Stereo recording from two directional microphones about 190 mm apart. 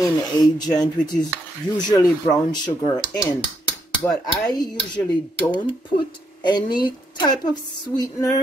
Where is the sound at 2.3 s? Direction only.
20° left (ahead or behind).